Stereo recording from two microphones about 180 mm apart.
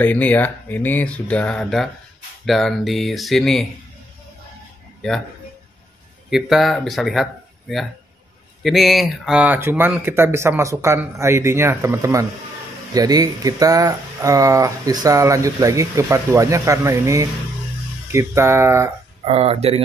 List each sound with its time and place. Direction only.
0.0 s speech: 10° left (ahead or behind)
6.3 s speech: centre (ahead or behind)
19.2 s speech: 35° right (ahead or behind)